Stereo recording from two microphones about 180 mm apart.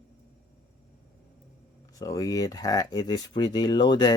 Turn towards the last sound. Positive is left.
turn(degrees=25)  # may be behind; listen again after turning